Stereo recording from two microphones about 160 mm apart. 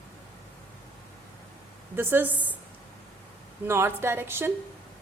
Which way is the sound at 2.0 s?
10° right (ahead or behind).